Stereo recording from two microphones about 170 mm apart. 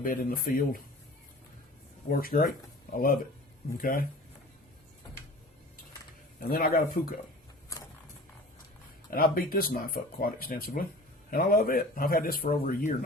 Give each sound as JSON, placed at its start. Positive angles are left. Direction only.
{"t": 0.0, "sound": "speech", "side_deg": 55}
{"t": 2.0, "sound": "speech", "side_deg": 55}
{"t": 6.5, "sound": "speech", "side_deg": 55}
{"t": 9.0, "sound": "speech", "side_deg": 60}